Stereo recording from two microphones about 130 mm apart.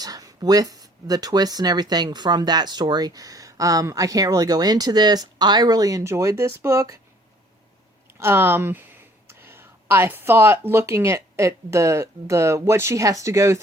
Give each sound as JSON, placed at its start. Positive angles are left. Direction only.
{"t": 0.0, "sound": "speech", "side_deg": -30}
{"t": 8.2, "sound": "speech", "side_deg": -20}